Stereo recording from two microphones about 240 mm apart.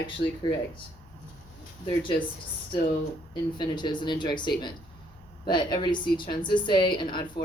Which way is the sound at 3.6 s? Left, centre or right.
Centre.